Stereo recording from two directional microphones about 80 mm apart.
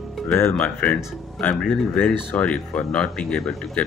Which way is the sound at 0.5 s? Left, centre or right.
Left.